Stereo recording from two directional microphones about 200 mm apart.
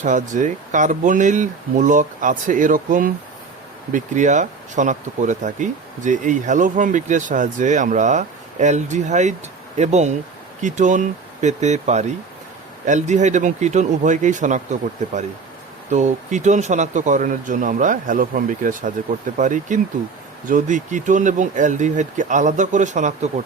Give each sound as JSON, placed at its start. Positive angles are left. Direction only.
{"t": 0.0, "sound": "speech", "side_deg": -40}